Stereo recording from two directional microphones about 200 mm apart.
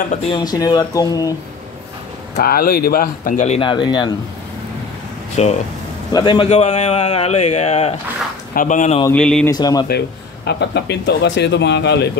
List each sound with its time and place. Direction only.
0.4 s speech: 20° left (ahead or behind)
2.3 s speech: 50° left (ahead or behind); by 4.1 s 20° left (ahead or behind)
5.3 s a man's voice: 35° left (ahead or behind)
9.1 s speech: 5° left (ahead or behind)
9.5 s speech: 20° left (ahead or behind)
9.8 s speech: 55° left (ahead or behind)